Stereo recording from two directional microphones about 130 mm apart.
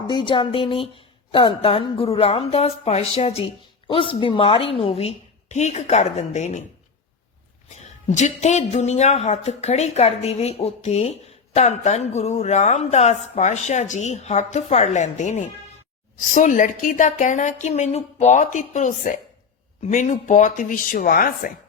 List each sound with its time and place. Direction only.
0.1 s a woman's voice: 40° left (ahead or behind); by 6.6 s 60° left (ahead or behind)
7.8 s speech: 60° left (ahead or behind); by 21.5 s 90° left